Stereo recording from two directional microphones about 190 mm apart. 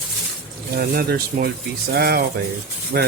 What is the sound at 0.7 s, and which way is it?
Speech, 55° right (ahead or behind).